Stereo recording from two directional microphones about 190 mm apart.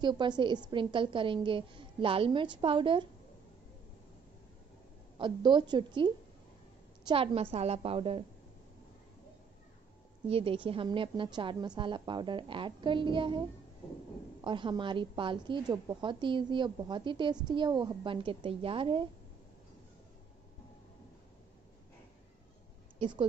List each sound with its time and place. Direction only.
0.0 s a woman's voice: 25° right (ahead or behind)
5.2 s a woman's voice: 25° right (ahead or behind)
10.2 s a woman's voice: 30° right (ahead or behind)
22.9 s speech: 25° right (ahead or behind)